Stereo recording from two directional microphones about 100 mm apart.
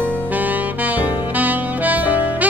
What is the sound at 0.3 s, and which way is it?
Saxophone, 15° right (ahead or behind).